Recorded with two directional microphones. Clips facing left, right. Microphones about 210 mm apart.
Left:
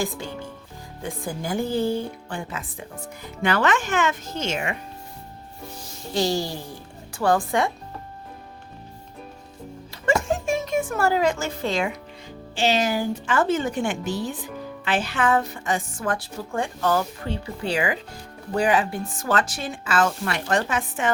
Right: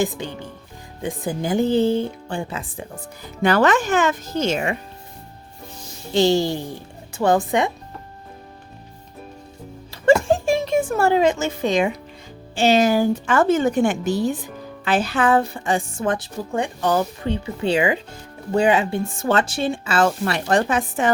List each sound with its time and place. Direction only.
0.0 s a woman's voice: 20° right (ahead or behind); by 4.8 s 35° right (ahead or behind)
6.1 s a woman's voice: 25° right (ahead or behind)
10.2 s speech: 30° right (ahead or behind)
12.5 s a woman's voice: 45° right (ahead or behind)